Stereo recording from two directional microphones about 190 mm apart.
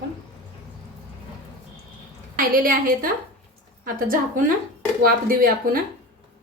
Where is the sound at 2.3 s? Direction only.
50° right (ahead or behind).